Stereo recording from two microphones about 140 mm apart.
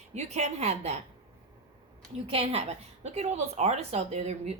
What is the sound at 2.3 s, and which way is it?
A woman's voice, 50° right (ahead or behind).